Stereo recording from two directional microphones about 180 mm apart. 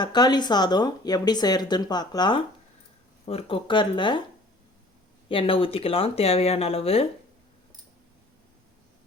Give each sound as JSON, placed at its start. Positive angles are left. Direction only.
{"t": 0.0, "sound": "speech", "side_deg": 25}
{"t": 5.3, "sound": "speech", "side_deg": 30}